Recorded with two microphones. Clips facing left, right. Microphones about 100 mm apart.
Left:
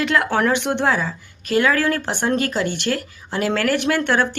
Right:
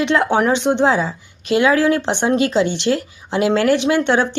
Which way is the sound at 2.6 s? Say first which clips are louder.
Right 4 dB; 50° left (ahead or behind).